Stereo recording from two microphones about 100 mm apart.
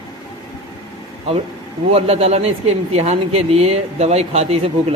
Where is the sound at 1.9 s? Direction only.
80° right.